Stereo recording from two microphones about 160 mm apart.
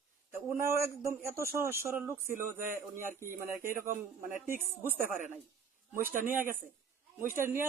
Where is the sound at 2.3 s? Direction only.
60° right (ahead or behind).